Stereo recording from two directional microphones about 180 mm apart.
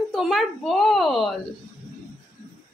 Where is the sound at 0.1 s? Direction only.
Centre (ahead or behind).